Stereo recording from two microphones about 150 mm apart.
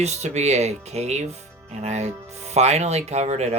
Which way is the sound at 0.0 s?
50° right (ahead or behind).